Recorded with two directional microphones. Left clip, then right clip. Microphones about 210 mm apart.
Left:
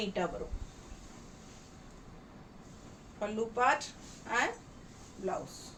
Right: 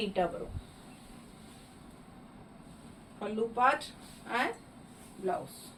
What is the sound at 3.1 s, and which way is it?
Speech, 15° left (ahead or behind).